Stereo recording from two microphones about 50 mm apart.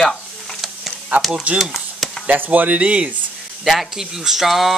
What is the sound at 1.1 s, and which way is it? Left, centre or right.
Speech, right.